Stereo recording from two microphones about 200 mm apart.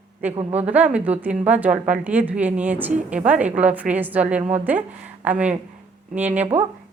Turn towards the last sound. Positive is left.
turn(degrees=-10)  # may be behind; listen again after turning